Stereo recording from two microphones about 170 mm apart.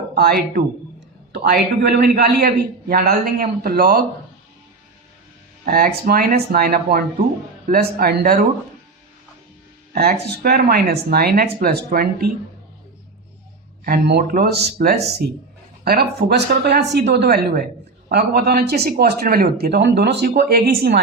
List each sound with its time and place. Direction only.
0.1 s speech: 65° right (ahead or behind)
3.0 s speech: 55° right (ahead or behind)
5.6 s speech: 55° right (ahead or behind)
9.9 s speech: 65° right (ahead or behind)
13.8 s speech: 65° right (ahead or behind)